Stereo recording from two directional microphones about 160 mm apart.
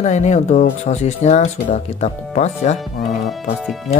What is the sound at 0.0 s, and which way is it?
Speech, 45° left (ahead or behind).